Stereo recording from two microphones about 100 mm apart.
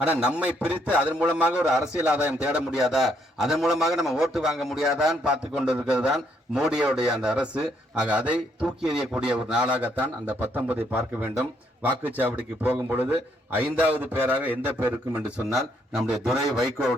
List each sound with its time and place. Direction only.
0.0 s a man's voice: 10° right (ahead or behind)
15.5 s a man's voice: 5° right (ahead or behind)